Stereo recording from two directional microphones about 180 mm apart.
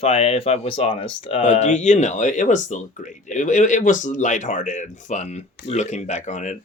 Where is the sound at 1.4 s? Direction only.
40° left (ahead or behind).